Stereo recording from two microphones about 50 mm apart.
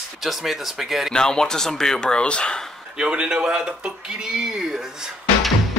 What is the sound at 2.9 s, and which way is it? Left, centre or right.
Speech, right.